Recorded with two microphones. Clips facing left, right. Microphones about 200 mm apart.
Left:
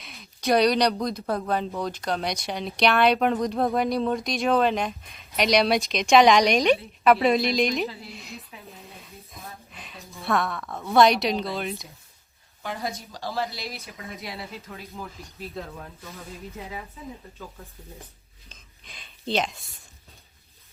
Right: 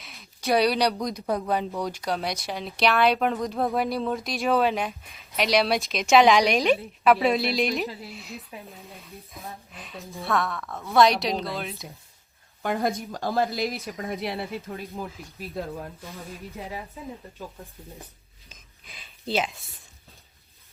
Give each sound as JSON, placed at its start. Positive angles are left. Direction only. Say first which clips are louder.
{"t": 0.0, "sound": "speech", "louder": "left 3 dB", "side_deg": 0}
{"t": 8.9, "sound": "a sound", "louder": "right 2 dB", "side_deg": 0}
{"t": 10.2, "sound": "speech", "louder": "left 1 dB", "side_deg": 0}
{"t": 12.6, "sound": "speech", "louder": "right 6 dB", "side_deg": -50}
{"t": 14.9, "sound": "speech", "louder": "right 3 dB", "side_deg": -15}
{"t": 18.9, "sound": "speech", "louder": "left 1 dB", "side_deg": -5}